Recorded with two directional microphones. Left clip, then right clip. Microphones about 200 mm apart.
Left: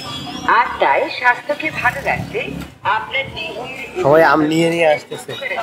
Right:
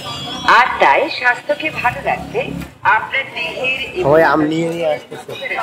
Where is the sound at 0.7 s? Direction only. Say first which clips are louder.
Right 3 dB; 20° right (ahead or behind).